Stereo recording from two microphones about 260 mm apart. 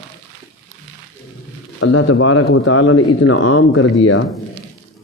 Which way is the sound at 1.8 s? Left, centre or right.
Left.